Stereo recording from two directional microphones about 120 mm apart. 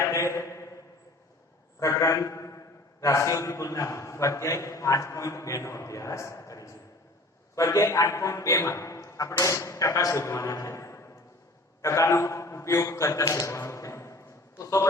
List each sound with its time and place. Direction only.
0.0 s mantra: 25° left (ahead or behind)
1.8 s a man's voice: 30° left (ahead or behind)
11.8 s a sound: 25° left (ahead or behind)